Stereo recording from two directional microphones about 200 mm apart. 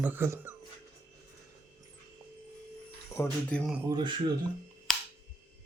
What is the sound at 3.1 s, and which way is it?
Speech, 10° left (ahead or behind).